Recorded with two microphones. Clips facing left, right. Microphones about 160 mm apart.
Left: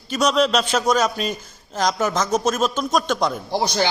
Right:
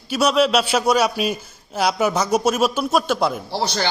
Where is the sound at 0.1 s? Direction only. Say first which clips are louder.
Right 1 dB; 10° right (ahead or behind).